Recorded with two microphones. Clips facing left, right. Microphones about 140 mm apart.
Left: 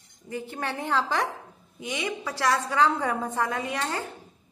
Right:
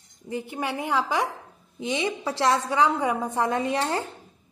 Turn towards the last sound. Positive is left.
turn(degrees=-25)  # may be behind; listen again after turning